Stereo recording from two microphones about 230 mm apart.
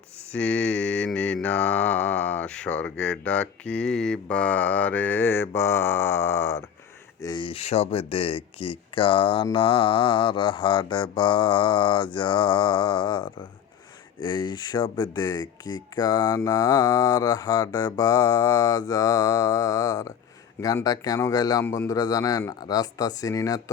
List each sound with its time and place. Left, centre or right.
0.3 s mantra: centre
5.5 s speech: centre